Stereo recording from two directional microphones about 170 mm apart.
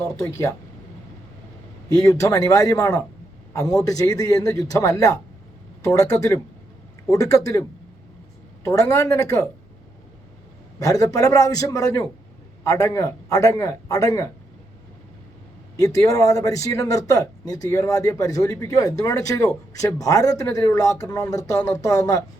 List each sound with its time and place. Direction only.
0.2 s speech: 20° left (ahead or behind)
2.0 s a man's voice: 20° left (ahead or behind)
8.6 s speech: 20° left (ahead or behind)
10.8 s speech: 20° left (ahead or behind)
15.8 s speech: 20° left (ahead or behind)